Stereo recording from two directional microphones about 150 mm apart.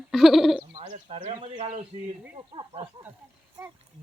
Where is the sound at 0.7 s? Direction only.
40° right (ahead or behind).